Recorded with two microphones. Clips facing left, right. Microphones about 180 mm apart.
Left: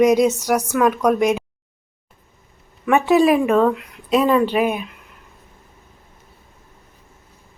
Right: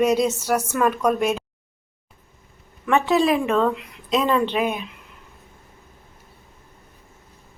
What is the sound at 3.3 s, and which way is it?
Speech, centre (ahead or behind).